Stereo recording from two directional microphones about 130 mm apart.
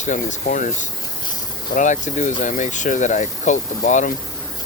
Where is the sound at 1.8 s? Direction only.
70° left (ahead or behind).